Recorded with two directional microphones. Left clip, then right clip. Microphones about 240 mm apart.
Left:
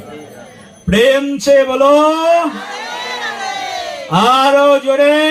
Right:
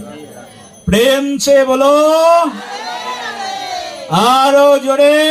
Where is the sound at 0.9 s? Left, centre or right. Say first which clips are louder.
Left 1 dB; right.